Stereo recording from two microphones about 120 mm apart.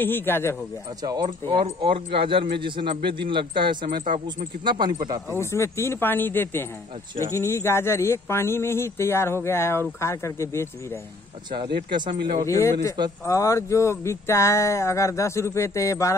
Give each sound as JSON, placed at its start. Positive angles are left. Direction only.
{"t": 0.0, "sound": "speech", "side_deg": 15}
{"t": 1.0, "sound": "speech", "side_deg": -35}
{"t": 4.0, "sound": "speech", "side_deg": -90}
{"t": 4.6, "sound": "speech", "side_deg": -40}
{"t": 5.4, "sound": "speech", "side_deg": 20}
{"t": 11.5, "sound": "speech", "side_deg": -40}
{"t": 12.4, "sound": "speech", "side_deg": 25}